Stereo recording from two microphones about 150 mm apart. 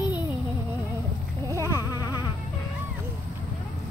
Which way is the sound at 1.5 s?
20° left (ahead or behind).